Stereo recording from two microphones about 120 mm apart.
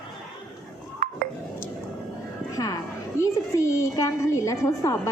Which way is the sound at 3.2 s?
25° left (ahead or behind).